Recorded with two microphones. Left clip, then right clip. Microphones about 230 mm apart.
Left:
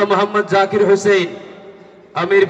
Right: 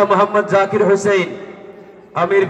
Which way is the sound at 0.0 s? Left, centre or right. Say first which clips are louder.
Right 2 dB; left.